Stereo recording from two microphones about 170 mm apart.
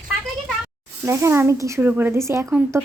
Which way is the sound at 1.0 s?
15° right (ahead or behind).